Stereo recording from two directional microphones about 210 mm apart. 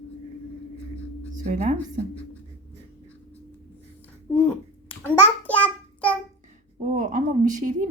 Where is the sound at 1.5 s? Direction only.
35° right (ahead or behind).